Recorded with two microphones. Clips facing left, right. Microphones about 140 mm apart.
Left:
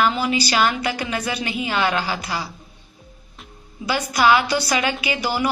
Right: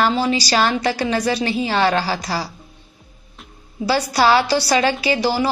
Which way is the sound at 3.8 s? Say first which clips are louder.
Right 2 dB; 35° right (ahead or behind).